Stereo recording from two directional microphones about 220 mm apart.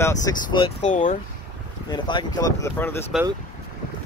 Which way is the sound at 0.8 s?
35° left (ahead or behind).